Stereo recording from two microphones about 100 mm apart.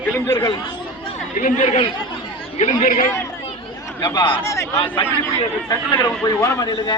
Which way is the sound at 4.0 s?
45° left (ahead or behind).